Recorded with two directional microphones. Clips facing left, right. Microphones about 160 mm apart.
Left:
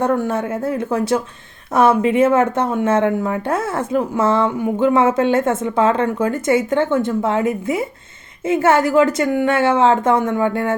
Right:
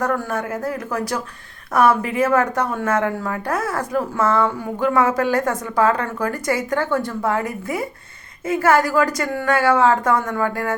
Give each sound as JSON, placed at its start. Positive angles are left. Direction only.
{"t": 0.0, "sound": "speech", "side_deg": 25}